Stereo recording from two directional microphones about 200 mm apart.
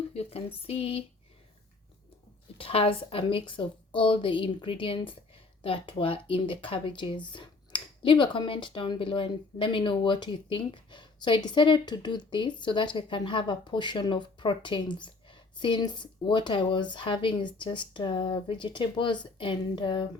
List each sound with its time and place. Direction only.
0.1 s a woman's voice: 30° left (ahead or behind)
2.6 s a woman's voice: 30° left (ahead or behind)